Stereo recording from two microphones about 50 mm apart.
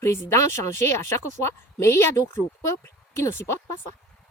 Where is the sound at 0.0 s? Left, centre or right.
Left.